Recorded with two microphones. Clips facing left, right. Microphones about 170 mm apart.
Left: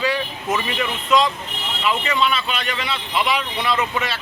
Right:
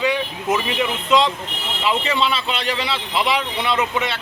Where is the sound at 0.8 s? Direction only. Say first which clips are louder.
Even; 25° right (ahead or behind).